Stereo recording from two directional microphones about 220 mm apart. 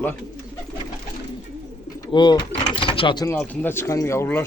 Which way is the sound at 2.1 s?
20° left (ahead or behind).